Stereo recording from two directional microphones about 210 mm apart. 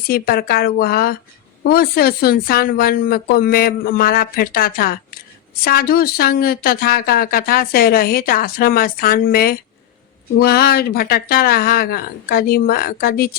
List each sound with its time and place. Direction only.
0.1 s speech: 45° left (ahead or behind)